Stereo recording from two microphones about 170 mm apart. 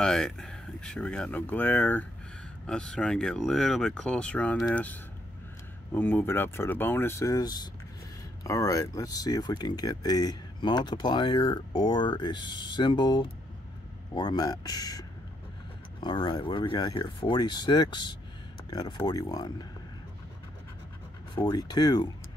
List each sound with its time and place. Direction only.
0.0 s speech: 5° left (ahead or behind); by 19.7 s 25° left (ahead or behind)
21.4 s speech: 25° left (ahead or behind)